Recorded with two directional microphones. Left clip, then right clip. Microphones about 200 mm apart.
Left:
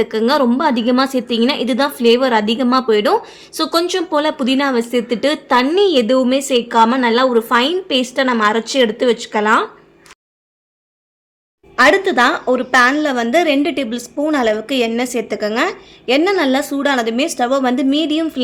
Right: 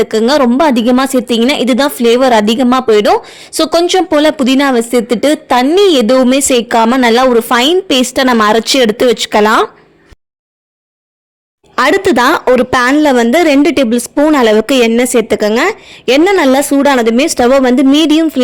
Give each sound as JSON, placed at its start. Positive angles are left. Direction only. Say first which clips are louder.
{"t": 0.1, "sound": "a woman's voice", "louder": "right 5 dB", "side_deg": -40}
{"t": 11.7, "sound": "speech", "louder": "right 3 dB", "side_deg": -50}